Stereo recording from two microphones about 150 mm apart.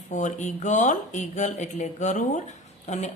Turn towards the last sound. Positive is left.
turn(degrees=50)  # may be behind; listen again after turning